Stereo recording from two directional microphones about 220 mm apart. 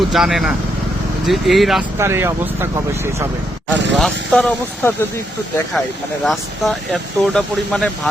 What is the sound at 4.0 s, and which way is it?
Speech, 5° left (ahead or behind).